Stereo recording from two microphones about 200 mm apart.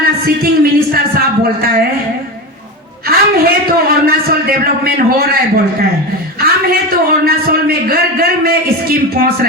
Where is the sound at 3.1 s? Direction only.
50° right (ahead or behind).